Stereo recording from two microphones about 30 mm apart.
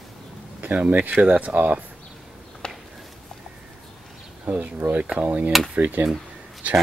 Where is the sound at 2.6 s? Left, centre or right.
Left.